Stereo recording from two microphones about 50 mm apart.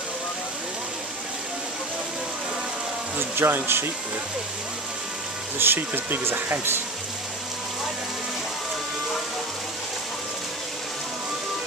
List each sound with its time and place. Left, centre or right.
3.2 s speech: right
5.6 s speech: right